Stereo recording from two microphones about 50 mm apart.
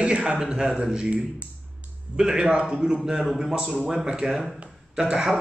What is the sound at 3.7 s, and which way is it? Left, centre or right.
A man's voice, centre.